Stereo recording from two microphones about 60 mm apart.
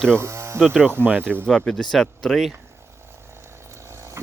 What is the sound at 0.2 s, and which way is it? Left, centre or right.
Hum, right.